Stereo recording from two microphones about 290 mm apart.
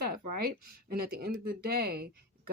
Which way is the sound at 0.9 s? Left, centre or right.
Right.